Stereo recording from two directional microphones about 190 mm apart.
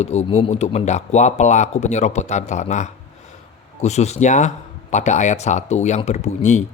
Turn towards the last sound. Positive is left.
turn(degrees=40)  # may be behind; listen again after turning